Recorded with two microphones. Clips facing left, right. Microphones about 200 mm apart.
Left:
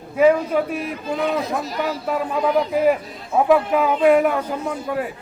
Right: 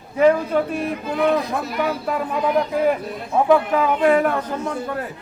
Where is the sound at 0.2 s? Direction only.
5° left (ahead or behind).